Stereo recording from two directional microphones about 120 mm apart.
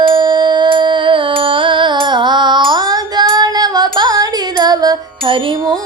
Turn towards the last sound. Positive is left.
turn(degrees=-45)  # may be behind; listen again after turning